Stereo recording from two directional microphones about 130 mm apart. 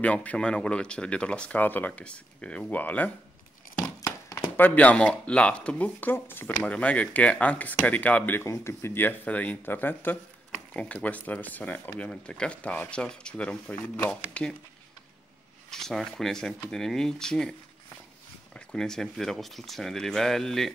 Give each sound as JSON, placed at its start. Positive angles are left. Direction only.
{"t": 0.0, "sound": "speech", "side_deg": 10}
{"t": 15.7, "sound": "speech", "side_deg": 5}